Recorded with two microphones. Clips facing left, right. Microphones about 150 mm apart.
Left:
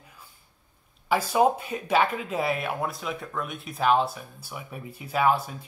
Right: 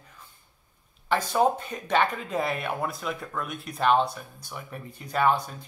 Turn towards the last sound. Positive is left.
turn(degrees=5)  # may be behind; listen again after turning